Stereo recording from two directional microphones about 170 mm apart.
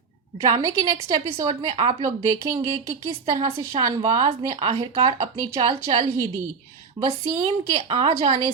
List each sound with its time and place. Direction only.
0.4 s a woman's voice: 25° right (ahead or behind)